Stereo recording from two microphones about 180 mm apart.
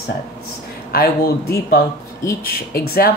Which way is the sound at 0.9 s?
60° left (ahead or behind).